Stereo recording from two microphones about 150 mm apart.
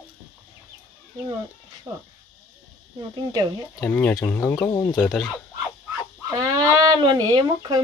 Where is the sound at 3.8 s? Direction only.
10° left (ahead or behind).